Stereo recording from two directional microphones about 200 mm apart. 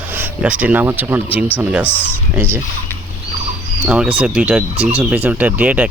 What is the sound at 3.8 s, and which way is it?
Speech, 5° right (ahead or behind).